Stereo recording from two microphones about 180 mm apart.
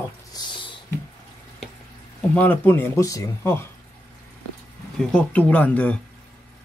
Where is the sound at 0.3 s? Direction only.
25° left (ahead or behind).